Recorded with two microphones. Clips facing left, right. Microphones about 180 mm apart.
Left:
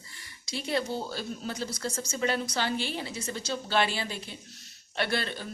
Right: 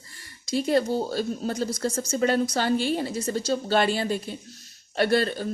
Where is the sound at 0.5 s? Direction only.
45° right (ahead or behind).